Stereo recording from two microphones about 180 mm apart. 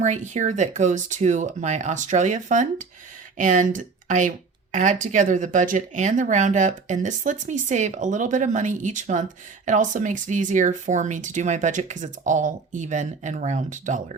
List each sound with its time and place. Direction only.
0.0 s speech: 40° right (ahead or behind)